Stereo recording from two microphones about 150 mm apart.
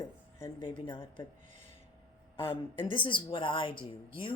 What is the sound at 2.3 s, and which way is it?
Speech, 35° left (ahead or behind).